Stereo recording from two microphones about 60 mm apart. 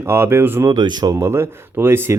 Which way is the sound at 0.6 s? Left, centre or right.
Right.